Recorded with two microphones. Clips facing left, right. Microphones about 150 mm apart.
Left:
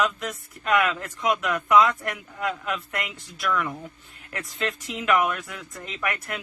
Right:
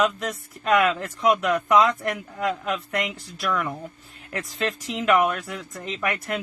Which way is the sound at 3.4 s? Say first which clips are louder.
Even; 35° right (ahead or behind).